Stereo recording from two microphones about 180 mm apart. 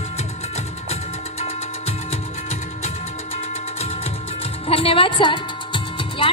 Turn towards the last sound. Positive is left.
turn(degrees=30)  # may be behind; listen again after turning